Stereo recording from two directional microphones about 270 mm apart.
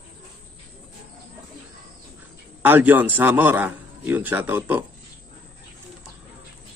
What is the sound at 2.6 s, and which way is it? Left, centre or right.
A man's voice, centre.